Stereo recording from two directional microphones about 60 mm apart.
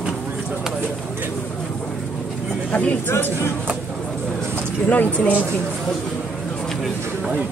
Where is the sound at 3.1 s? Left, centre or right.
Left.